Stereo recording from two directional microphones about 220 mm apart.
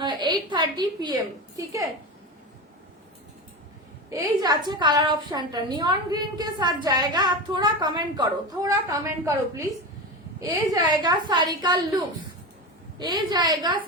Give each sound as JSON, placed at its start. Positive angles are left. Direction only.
{"t": 0.0, "sound": "a woman's voice", "side_deg": -20}
{"t": 4.1, "sound": "a woman's voice", "side_deg": -15}